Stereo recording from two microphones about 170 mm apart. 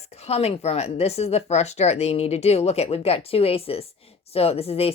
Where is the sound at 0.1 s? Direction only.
40° left (ahead or behind).